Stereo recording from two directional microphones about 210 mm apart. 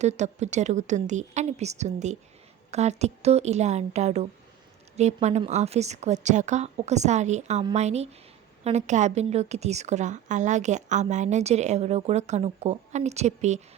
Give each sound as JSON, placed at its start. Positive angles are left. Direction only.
{"t": 0.0, "sound": "a woman's voice", "side_deg": -35}